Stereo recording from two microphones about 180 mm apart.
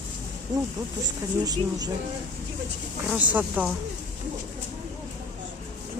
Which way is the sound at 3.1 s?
10° right (ahead or behind).